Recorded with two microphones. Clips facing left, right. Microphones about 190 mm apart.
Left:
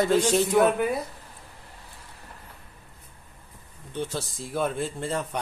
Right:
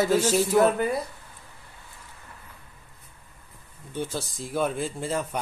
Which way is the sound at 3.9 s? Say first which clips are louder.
Even; centre (ahead or behind).